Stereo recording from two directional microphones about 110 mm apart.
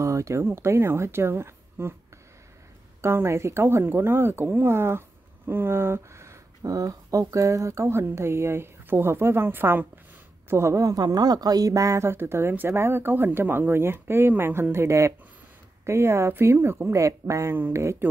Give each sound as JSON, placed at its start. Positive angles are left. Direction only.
{"t": 0.0, "sound": "speech", "side_deg": -30}
{"t": 3.0, "sound": "speech", "side_deg": -25}